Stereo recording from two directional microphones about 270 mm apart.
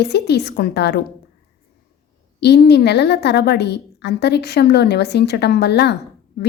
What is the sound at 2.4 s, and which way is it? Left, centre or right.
A woman's voice, left.